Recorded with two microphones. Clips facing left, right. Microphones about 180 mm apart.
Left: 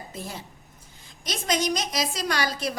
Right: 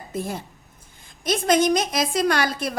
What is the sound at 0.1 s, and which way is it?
A woman's voice, 50° right (ahead or behind).